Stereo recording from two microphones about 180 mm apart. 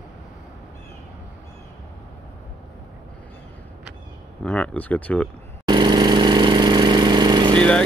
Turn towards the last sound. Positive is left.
turn(degrees=-25)  # may be behind; listen again after turning